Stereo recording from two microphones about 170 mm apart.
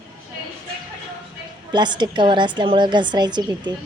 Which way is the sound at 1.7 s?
25° right (ahead or behind).